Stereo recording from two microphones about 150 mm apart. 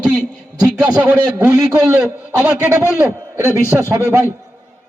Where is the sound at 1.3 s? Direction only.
15° right (ahead or behind).